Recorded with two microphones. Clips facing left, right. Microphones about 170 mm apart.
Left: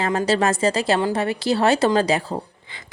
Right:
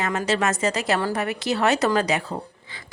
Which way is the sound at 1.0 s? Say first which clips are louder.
Left 3 dB; 20° left (ahead or behind).